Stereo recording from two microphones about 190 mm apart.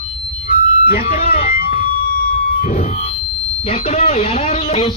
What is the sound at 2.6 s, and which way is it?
Music, 40° left (ahead or behind).